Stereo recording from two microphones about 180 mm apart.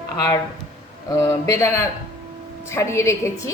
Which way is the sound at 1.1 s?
20° left (ahead or behind).